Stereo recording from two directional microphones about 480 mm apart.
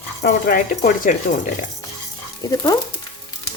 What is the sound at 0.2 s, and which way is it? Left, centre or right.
Speech, centre.